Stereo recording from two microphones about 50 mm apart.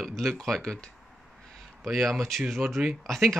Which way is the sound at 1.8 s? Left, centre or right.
Centre.